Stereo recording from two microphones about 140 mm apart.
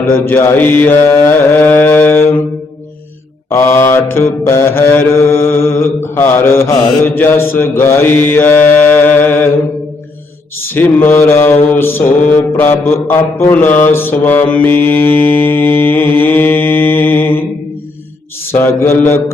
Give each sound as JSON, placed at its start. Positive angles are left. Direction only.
{"t": 0.0, "sound": "mantra", "side_deg": 15}
{"t": 3.5, "sound": "mantra", "side_deg": 20}
{"t": 10.7, "sound": "mantra", "side_deg": 15}
{"t": 18.5, "sound": "mantra", "side_deg": 15}